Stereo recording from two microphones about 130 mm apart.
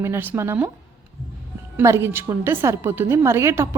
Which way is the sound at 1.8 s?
20° right (ahead or behind).